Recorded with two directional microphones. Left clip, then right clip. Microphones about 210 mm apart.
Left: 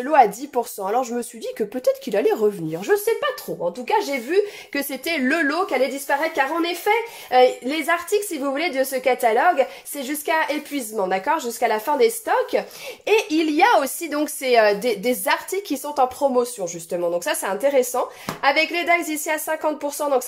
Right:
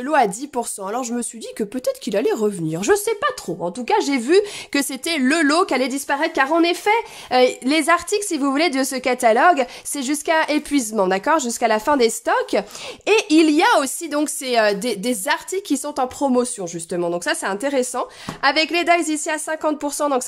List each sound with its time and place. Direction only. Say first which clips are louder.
0.0 s speech: left 2 dB; 20° right (ahead or behind)
2.7 s speech: right 1 dB; 40° right (ahead or behind)
4.7 s a woman's voice: right 2 dB; 25° right (ahead or behind)
15.7 s speech: left 2 dB; 35° right (ahead or behind)